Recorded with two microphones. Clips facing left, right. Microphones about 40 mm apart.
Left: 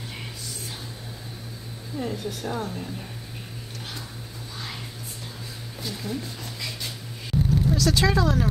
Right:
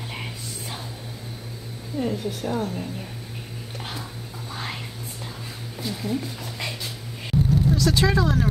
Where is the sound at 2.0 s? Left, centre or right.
Centre.